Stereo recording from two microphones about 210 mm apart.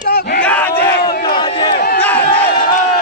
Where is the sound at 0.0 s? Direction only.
45° left (ahead or behind).